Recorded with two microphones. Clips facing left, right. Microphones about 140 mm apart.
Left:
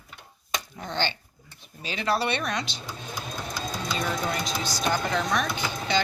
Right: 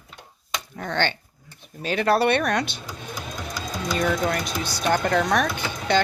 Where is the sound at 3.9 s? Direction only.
55° right (ahead or behind).